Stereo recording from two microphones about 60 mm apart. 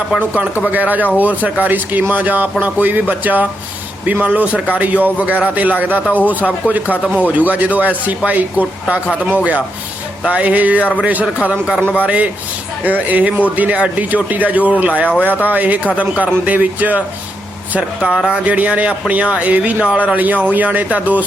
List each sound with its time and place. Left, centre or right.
0.7 s speech: right
17.7 s speech: centre
18.4 s speech: right